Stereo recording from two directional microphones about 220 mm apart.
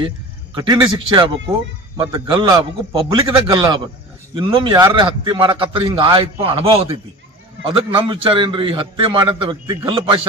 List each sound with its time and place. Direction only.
0.6 s a man's voice: 20° right (ahead or behind)